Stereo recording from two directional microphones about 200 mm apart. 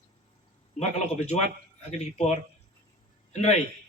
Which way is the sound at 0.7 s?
35° left (ahead or behind).